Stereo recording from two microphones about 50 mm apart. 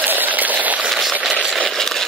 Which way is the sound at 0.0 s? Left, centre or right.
Right.